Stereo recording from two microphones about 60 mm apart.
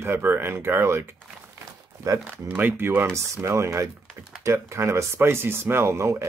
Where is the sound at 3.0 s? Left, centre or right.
Right.